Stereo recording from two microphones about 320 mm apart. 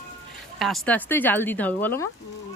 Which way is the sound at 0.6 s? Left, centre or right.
Centre.